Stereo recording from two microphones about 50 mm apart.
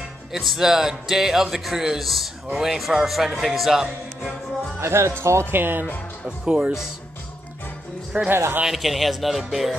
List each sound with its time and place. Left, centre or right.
0.3 s a man's voice: centre
4.7 s speech: right
5.5 s speech: right
6.2 s speech: centre
8.1 s speech: right
8.6 s speech: centre